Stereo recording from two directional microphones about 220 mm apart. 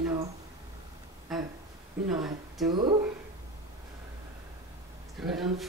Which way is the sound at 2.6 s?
20° right (ahead or behind).